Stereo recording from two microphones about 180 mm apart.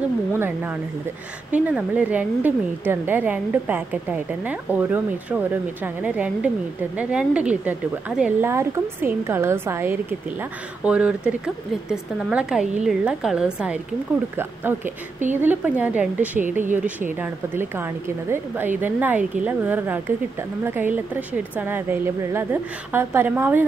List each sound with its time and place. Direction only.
0.3 s a woman's voice: 10° right (ahead or behind)
16.4 s speech: 45° right (ahead or behind)
17.2 s speech: 10° right (ahead or behind)